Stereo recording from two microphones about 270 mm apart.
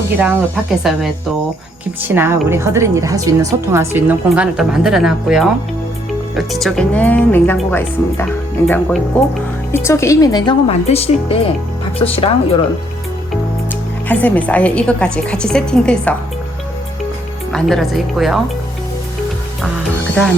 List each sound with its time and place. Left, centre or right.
0.2 s a woman's voice: centre; by 12.6 s left
14.1 s speech: centre
17.5 s speech: centre